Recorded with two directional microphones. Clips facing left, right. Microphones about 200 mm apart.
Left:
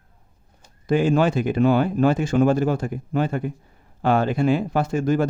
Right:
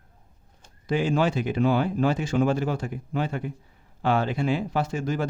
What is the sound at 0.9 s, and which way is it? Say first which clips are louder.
A man's voice: left 5 dB; 50° left (ahead or behind).